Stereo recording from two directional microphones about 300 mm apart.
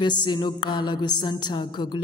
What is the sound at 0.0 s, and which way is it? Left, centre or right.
Speech, centre.